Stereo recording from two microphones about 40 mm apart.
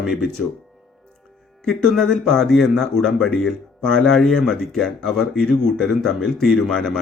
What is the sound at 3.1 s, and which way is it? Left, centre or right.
Speech, left.